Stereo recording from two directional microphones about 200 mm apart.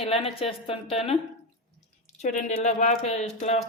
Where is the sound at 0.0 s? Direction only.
30° left (ahead or behind).